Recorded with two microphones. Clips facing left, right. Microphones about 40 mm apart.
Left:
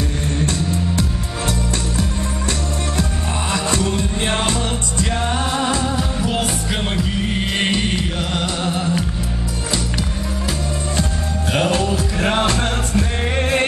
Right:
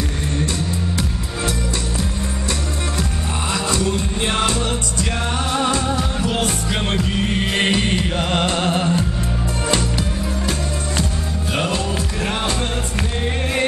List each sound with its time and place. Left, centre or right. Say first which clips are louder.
3.5 s music: even; left
5.9 s music: even; centre
7.5 s music: right 1 dB; centre
8.2 s music: right 3 dB; right
11.7 s music: left 3 dB; left